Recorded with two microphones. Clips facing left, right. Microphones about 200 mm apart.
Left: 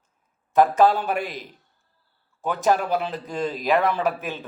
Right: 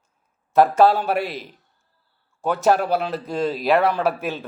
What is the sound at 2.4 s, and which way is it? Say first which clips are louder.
A man's voice: right 3 dB; 40° right (ahead or behind).